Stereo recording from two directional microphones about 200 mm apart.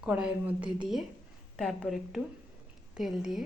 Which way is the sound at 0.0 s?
5° right (ahead or behind).